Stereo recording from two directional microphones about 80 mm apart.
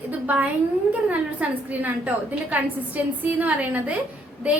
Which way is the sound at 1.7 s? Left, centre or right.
Centre.